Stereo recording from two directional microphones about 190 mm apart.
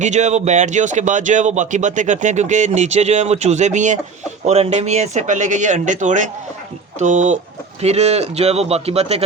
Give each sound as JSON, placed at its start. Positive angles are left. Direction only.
{"t": 0.0, "sound": "speech", "side_deg": -40}